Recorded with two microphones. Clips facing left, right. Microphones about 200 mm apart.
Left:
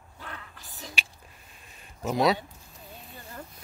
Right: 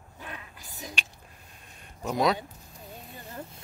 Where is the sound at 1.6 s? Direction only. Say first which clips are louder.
Left 2 dB; 5° left (ahead or behind).